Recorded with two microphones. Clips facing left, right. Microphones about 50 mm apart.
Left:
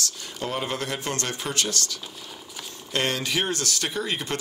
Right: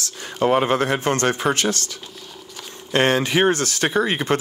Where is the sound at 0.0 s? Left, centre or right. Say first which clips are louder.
Right 10 dB; right.